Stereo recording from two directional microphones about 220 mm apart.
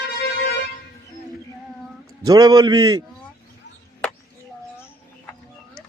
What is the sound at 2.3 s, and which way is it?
Speech, 15° right (ahead or behind).